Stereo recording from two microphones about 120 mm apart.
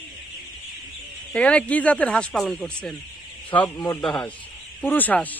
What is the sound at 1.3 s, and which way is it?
Speech, 10° left (ahead or behind).